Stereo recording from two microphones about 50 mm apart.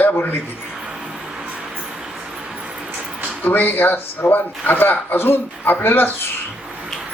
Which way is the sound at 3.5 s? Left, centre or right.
Left.